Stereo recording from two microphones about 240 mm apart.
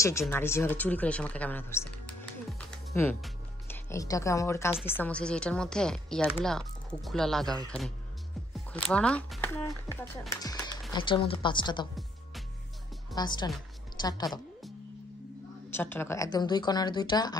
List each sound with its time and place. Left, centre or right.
0.0 s speech: centre
8.5 s speech: centre
13.1 s speech: centre
15.7 s speech: centre